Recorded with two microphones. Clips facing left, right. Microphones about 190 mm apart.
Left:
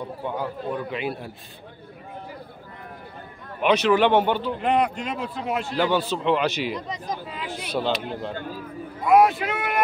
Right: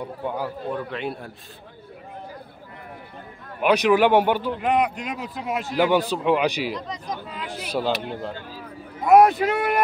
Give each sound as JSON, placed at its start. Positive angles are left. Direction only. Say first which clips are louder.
{"t": 0.2, "sound": "a man's voice", "louder": "right 1 dB", "side_deg": -5}
{"t": 3.6, "sound": "a man's voice", "louder": "right 1 dB", "side_deg": -10}
{"t": 6.9, "sound": "a man's voice", "louder": "left 1 dB", "side_deg": 5}
{"t": 7.6, "sound": "a man's voice", "louder": "right 1 dB", "side_deg": -10}
{"t": 9.0, "sound": "speech", "louder": "right 3 dB", "side_deg": -45}